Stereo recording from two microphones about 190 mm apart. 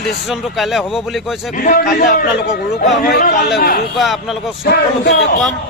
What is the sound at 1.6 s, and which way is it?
A man's voice, 45° left (ahead or behind).